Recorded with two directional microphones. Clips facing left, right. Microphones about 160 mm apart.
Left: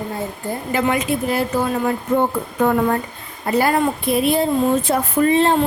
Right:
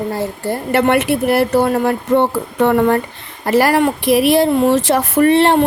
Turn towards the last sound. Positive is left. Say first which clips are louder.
# right 4 dB
turn(degrees=-75)  # may be behind; listen again after turning